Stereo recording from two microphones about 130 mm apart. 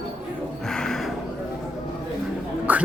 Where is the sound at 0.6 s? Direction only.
5° left (ahead or behind).